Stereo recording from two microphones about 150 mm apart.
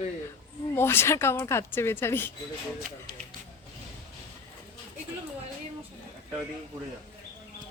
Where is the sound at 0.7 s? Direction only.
15° left (ahead or behind).